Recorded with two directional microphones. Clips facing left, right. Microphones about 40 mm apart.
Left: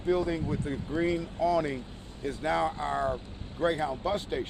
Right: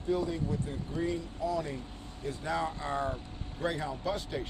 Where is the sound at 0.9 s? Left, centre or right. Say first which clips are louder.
Left 5 dB; left.